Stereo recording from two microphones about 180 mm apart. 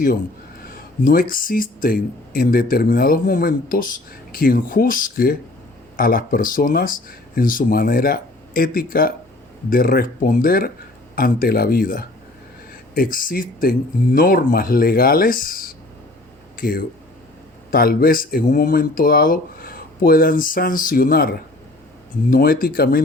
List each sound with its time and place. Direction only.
1.0 s speech: 50° left (ahead or behind)